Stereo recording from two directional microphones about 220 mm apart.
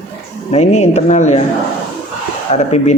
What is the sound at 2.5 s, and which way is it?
Speech, 30° left (ahead or behind).